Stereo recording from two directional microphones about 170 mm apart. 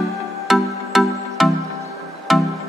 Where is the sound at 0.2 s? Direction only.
Centre (ahead or behind).